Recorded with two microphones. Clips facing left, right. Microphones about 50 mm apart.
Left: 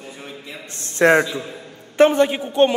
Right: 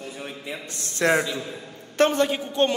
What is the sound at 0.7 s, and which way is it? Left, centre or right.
Speech, left.